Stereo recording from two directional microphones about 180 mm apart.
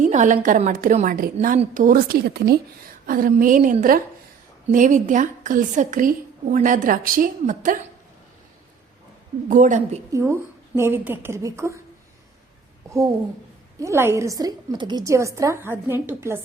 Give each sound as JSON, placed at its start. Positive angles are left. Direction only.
{"t": 0.0, "sound": "a woman's voice", "side_deg": -40}
{"t": 3.1, "sound": "a woman's voice", "side_deg": -50}
{"t": 9.5, "sound": "a woman's voice", "side_deg": -45}
{"t": 10.1, "sound": "a woman's voice", "side_deg": -15}
{"t": 13.7, "sound": "a woman's voice", "side_deg": -15}